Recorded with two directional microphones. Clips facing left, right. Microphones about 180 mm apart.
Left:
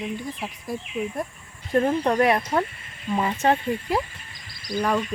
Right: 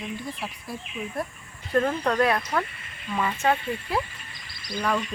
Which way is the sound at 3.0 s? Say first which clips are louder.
Left 3 dB; 30° left (ahead or behind).